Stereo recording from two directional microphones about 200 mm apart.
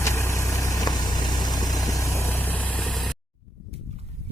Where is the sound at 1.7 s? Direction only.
Centre (ahead or behind).